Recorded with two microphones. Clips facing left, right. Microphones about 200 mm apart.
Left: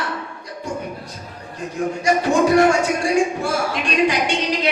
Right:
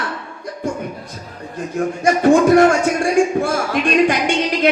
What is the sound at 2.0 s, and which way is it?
Music, 50° right (ahead or behind).